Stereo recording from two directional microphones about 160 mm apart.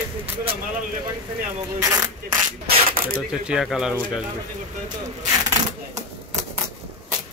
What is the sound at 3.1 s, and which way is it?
Speech, 5° right (ahead or behind).